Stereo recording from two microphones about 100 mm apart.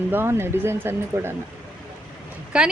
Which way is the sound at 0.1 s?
25° right (ahead or behind).